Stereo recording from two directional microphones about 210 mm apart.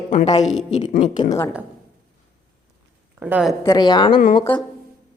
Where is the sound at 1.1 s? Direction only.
20° left (ahead or behind).